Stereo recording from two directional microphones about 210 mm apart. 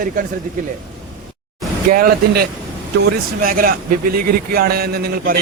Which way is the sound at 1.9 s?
45° right (ahead or behind).